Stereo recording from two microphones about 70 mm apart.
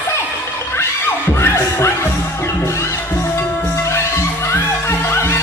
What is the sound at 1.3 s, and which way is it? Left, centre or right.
Music, left.